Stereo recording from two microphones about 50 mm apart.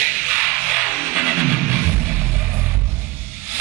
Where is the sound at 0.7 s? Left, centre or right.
Centre.